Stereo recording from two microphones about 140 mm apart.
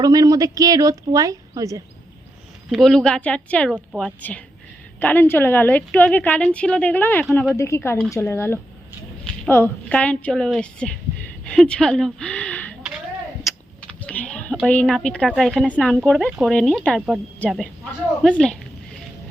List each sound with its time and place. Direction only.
0.0 s speech: 25° right (ahead or behind)
2.6 s a woman's voice: centre (ahead or behind)
13.8 s a sound: 10° left (ahead or behind)
14.5 s speech: 5° left (ahead or behind)